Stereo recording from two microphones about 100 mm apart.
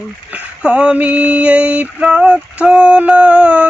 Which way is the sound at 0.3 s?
10° right (ahead or behind).